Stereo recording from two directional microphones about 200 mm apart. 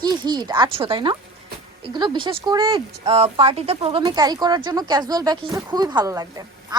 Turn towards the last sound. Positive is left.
turn(degrees=-15)  # may be behind; listen again after turning